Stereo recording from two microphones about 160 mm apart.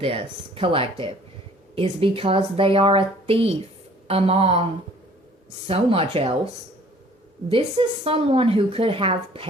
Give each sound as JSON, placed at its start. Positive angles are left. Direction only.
{"t": 0.0, "sound": "speech", "side_deg": -35}
{"t": 5.6, "sound": "speech", "side_deg": -35}
{"t": 7.5, "sound": "speech", "side_deg": -35}